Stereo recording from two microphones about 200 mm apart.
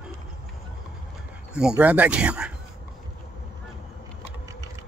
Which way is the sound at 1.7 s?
5° right (ahead or behind).